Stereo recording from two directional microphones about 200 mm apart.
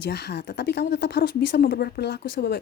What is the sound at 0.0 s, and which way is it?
Speech, 55° left (ahead or behind).